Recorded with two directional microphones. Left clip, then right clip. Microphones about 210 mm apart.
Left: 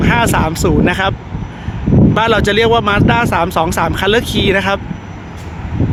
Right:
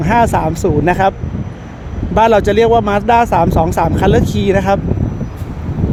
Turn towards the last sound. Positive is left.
turn(degrees=-20)  # may be behind; listen again after turning